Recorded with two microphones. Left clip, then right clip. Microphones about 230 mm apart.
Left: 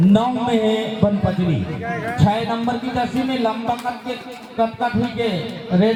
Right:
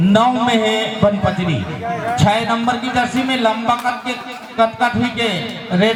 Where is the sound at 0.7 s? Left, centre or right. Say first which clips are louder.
Right 4 dB; right.